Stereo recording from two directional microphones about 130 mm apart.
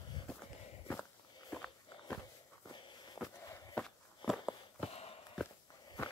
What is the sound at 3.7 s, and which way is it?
Walk, 5° left (ahead or behind).